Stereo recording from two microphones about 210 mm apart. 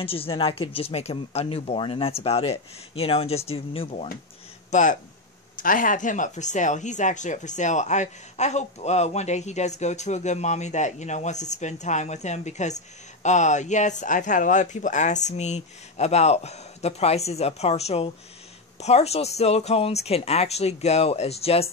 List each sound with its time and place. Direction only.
0.0 s speech: 25° left (ahead or behind)